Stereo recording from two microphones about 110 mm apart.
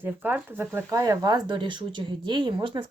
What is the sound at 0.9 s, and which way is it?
Speech, 35° right (ahead or behind).